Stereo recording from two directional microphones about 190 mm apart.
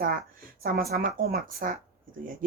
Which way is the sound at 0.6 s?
50° right (ahead or behind).